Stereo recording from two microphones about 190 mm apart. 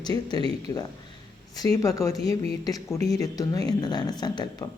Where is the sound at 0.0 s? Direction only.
20° left (ahead or behind).